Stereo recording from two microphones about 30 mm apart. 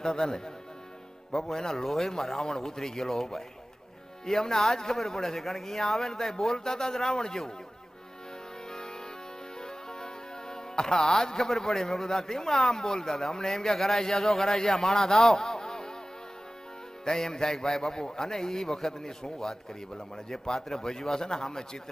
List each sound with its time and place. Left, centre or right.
0.0 s speech: left
1.3 s speech: centre
9.6 s music: left
10.5 s speech: left
17.1 s speech: left